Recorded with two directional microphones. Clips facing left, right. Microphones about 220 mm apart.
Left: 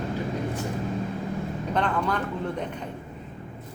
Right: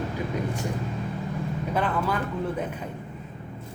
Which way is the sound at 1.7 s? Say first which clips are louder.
Left 1 dB; 5° right (ahead or behind).